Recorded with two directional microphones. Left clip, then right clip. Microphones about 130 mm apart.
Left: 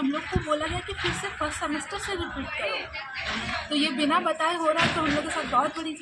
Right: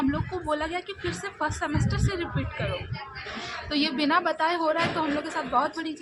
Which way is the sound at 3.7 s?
55° right (ahead or behind).